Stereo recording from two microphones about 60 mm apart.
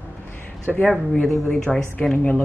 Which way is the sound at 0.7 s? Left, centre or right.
Centre.